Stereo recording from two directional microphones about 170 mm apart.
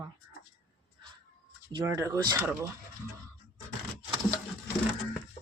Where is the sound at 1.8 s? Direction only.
15° right (ahead or behind).